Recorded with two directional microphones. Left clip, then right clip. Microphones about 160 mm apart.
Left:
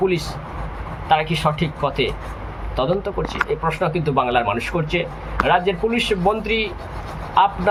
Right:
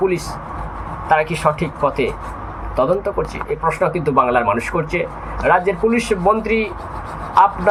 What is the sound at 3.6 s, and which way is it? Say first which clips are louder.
Speech: right 4 dB; 35° left (ahead or behind).